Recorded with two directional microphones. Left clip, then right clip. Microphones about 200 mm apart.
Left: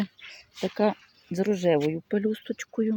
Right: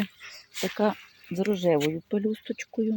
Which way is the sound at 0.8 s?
5° left (ahead or behind).